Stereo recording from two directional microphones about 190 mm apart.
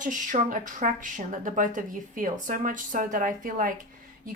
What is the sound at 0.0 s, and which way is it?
Speech, 45° right (ahead or behind).